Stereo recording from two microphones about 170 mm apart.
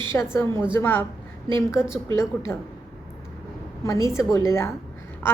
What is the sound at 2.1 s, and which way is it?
Speech, 15° left (ahead or behind).